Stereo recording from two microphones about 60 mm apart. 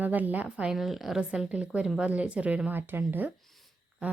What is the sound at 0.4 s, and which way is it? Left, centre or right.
Speech, centre.